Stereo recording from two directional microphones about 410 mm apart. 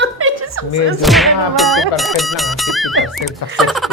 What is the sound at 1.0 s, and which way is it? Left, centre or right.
Music, centre.